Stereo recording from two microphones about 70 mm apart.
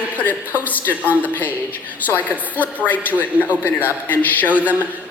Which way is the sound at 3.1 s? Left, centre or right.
Right.